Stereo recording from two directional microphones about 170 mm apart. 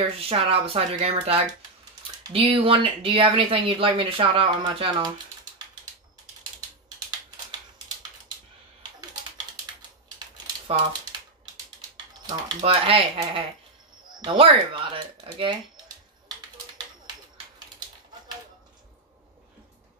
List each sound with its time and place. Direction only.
0.3 s speech: 35° right (ahead or behind)
9.8 s typewriter: 25° right (ahead or behind)
12.3 s speech: 25° right (ahead or behind)